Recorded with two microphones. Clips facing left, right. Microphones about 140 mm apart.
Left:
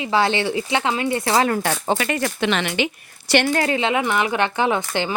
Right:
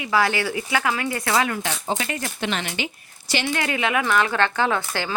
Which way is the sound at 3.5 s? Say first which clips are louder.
Left 4 dB; 35° left (ahead or behind).